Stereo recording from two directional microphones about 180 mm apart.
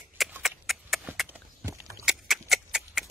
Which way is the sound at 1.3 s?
15° right (ahead or behind).